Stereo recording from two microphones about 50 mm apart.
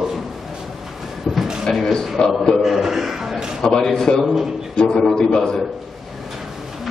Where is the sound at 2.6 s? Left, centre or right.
Centre.